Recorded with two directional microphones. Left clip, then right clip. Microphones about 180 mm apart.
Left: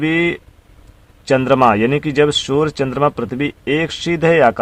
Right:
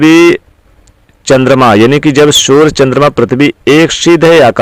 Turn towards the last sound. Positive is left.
turn(degrees=-40)  # may be behind; listen again after turning